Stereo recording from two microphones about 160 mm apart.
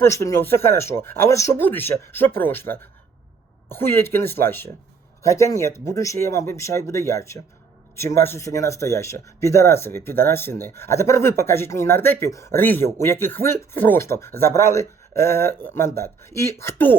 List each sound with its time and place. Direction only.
0.0 s speech: 20° left (ahead or behind)